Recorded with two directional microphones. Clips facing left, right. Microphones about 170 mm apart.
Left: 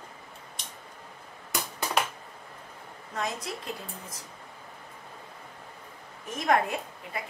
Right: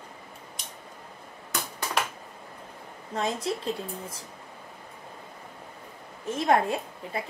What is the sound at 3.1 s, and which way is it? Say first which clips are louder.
Speech: right 5 dB; 30° right (ahead or behind).